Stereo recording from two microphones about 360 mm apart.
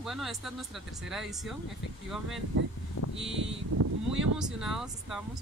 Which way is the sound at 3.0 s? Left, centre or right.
Left.